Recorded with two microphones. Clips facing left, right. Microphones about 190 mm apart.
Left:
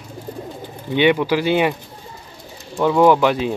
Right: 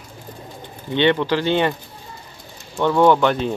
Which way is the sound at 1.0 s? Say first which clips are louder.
Left 2 dB; 10° left (ahead or behind).